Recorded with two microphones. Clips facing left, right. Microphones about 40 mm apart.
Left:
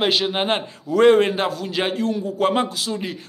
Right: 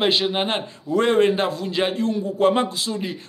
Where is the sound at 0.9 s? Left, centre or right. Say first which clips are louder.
Left 3 dB; left.